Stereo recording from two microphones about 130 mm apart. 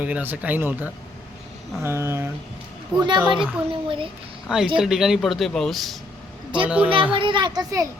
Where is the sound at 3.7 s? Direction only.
45° right (ahead or behind).